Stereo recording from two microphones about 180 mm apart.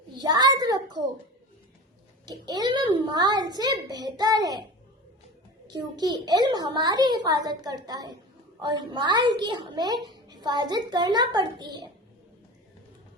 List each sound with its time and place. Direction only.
0.1 s a sound: 20° right (ahead or behind)
2.2 s a child's voice: 25° right (ahead or behind)
5.6 s a child's voice: 20° right (ahead or behind)